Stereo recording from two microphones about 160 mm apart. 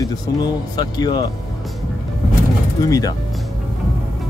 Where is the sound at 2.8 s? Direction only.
20° left (ahead or behind).